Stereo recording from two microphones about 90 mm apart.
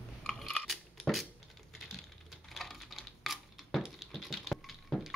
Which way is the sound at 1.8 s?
Centre (ahead or behind).